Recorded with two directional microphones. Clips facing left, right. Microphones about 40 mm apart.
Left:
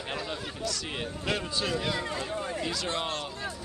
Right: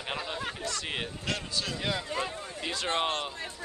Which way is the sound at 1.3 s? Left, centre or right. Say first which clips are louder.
Left 4 dB; centre.